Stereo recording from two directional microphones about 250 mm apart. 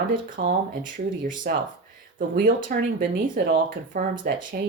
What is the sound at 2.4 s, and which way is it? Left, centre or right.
Speech, right.